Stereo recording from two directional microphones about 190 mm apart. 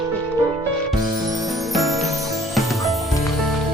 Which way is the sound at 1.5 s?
Centre (ahead or behind).